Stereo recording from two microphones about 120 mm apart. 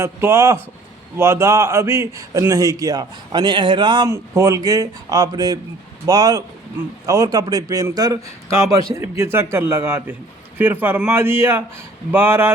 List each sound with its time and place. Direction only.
0.0 s a man's voice: 20° right (ahead or behind); by 4.1 s 35° right (ahead or behind)
4.1 s a man's voice: 25° right (ahead or behind)